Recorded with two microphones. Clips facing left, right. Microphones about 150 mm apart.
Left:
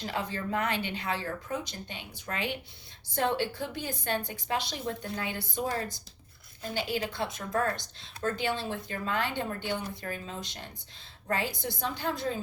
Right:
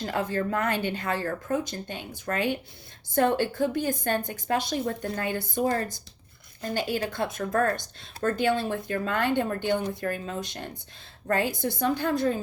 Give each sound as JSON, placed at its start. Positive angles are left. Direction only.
{"t": 0.0, "sound": "a woman's voice", "side_deg": -45}